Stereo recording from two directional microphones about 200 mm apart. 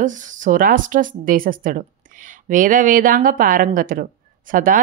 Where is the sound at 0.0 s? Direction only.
40° right (ahead or behind).